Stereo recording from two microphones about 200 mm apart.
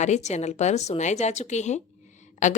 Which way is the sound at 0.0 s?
35° left (ahead or behind).